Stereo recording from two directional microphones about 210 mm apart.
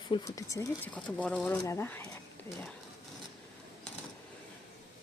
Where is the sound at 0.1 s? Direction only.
20° left (ahead or behind).